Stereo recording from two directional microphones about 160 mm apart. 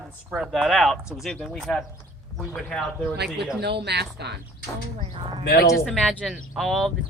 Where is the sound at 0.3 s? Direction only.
5° right (ahead or behind).